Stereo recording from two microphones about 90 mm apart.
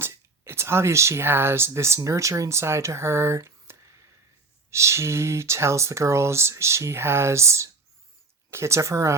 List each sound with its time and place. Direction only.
0.0 s speech: 30° right (ahead or behind)